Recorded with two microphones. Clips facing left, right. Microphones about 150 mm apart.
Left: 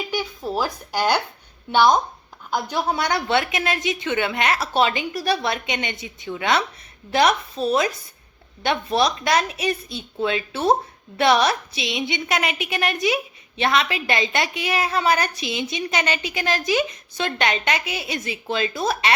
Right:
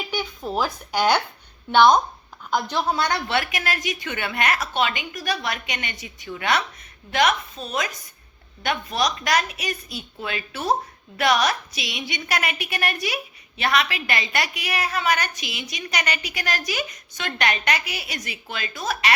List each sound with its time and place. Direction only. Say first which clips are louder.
0.4 s speech: even; 5° left (ahead or behind)
1.7 s a woman's voice: right 1 dB; 10° left (ahead or behind); by 19.1 s 30° left (ahead or behind)